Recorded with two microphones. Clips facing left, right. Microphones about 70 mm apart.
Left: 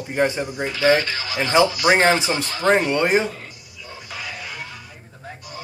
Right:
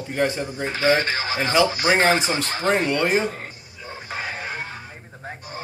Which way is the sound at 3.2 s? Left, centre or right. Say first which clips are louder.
Right 2 dB; right.